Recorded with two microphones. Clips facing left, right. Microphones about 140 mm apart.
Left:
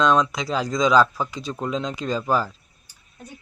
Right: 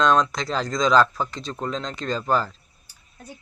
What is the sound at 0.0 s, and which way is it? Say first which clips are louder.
Speech: even; 5° left (ahead or behind).